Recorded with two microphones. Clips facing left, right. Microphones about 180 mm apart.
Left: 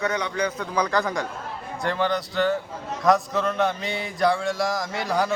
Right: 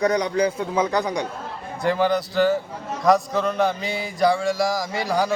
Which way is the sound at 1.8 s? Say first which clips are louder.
Right 4 dB; 5° right (ahead or behind).